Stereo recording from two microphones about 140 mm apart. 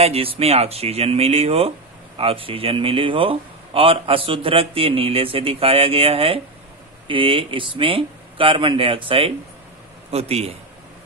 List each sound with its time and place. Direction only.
0.0 s a man's voice: 45° right (ahead or behind)